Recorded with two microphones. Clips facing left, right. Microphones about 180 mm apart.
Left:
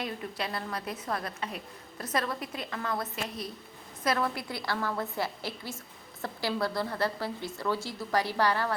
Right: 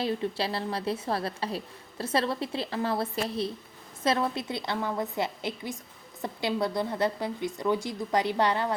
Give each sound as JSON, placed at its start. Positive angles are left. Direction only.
{"t": 0.0, "sound": "a woman's voice", "side_deg": -30}